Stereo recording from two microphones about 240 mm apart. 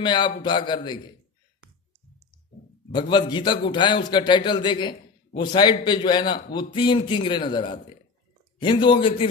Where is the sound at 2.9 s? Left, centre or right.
Centre.